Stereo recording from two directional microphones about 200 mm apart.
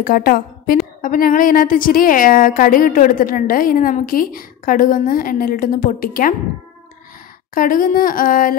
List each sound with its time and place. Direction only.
0.0 s a woman's voice: 45° left (ahead or behind)
7.5 s a woman's voice: 45° left (ahead or behind)